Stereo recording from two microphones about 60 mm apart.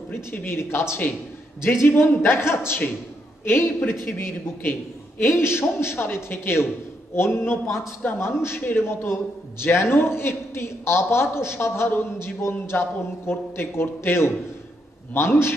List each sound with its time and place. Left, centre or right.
0.1 s a man's voice: left